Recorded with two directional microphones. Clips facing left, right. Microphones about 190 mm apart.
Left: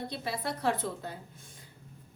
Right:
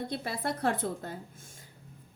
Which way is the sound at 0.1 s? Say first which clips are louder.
Right 2 dB; 50° right (ahead or behind).